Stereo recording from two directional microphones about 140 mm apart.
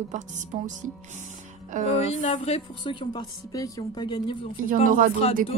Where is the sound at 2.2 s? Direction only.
60° left (ahead or behind).